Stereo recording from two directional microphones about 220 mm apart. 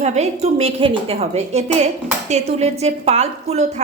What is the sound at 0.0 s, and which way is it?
A woman's voice, 30° right (ahead or behind).